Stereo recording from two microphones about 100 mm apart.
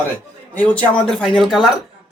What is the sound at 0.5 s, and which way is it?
Speech, 15° left (ahead or behind).